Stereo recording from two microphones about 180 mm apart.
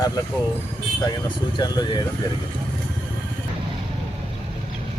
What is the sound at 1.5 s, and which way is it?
Speech, 25° left (ahead or behind).